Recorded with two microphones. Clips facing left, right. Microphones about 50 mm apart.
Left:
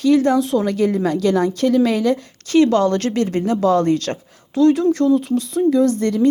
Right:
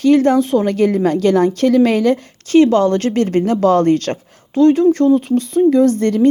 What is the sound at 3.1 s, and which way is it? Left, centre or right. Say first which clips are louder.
A woman's voice: right 4 dB; right.